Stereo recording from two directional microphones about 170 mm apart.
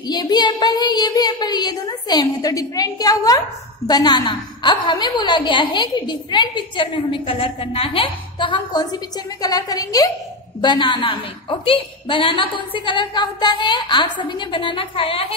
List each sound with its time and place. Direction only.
0.1 s a woman's voice: 25° left (ahead or behind)